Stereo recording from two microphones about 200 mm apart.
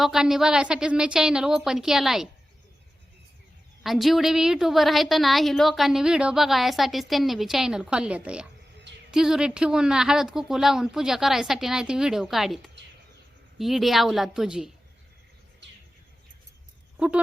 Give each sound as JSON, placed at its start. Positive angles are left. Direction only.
{"t": 0.0, "sound": "a woman's voice", "side_deg": 0}
{"t": 3.8, "sound": "a woman's voice", "side_deg": 0}